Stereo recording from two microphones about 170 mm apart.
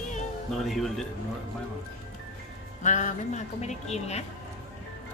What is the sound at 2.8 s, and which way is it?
Speech, 45° left (ahead or behind).